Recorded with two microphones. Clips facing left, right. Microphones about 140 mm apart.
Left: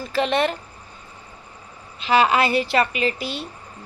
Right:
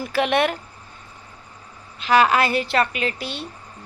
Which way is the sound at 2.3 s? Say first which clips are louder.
Left 1 dB; 45° right (ahead or behind).